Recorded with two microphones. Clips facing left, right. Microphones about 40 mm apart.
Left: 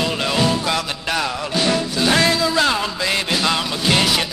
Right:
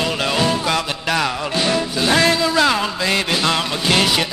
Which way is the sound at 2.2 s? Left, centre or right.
Right.